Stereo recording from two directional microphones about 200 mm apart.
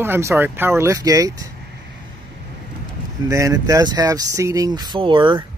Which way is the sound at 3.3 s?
15° right (ahead or behind).